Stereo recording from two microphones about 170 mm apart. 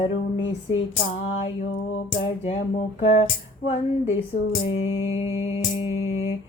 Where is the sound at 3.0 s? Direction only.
35° left (ahead or behind).